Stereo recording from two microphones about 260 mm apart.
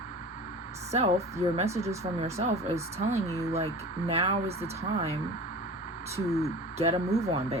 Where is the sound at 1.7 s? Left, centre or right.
Centre.